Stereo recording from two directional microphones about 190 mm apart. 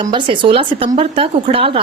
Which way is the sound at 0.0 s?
25° right (ahead or behind).